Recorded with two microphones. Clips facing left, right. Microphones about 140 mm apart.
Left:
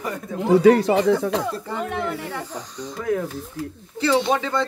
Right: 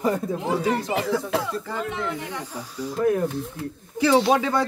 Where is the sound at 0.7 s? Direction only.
70° left (ahead or behind).